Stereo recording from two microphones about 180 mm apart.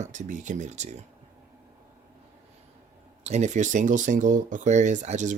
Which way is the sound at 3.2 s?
40° right (ahead or behind).